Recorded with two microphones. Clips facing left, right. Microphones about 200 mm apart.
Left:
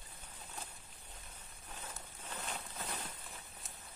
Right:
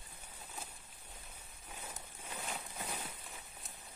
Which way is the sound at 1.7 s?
10° right (ahead or behind).